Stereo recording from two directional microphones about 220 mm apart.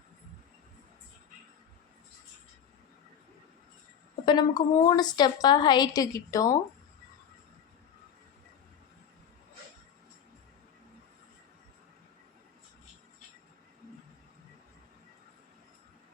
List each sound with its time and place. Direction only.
4.3 s a woman's voice: 20° left (ahead or behind)